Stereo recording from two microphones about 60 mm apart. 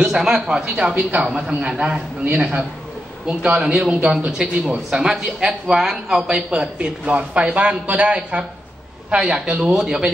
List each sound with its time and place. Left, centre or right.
0.0 s speech: centre
1.2 s a man's voice: centre
3.3 s a man's voice: centre